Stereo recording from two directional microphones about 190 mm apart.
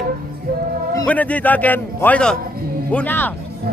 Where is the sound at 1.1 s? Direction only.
10° left (ahead or behind).